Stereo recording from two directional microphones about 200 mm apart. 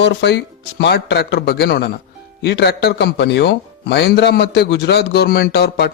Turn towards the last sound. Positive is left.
turn(degrees=55)  # may be behind; listen again after turning